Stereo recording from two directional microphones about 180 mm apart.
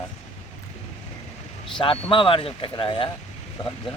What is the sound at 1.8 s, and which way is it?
Speech, 30° left (ahead or behind).